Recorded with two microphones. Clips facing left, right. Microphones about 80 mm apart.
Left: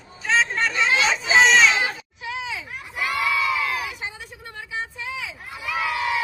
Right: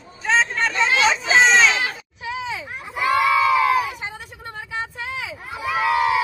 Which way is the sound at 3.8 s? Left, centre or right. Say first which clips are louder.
Right 7 dB; right.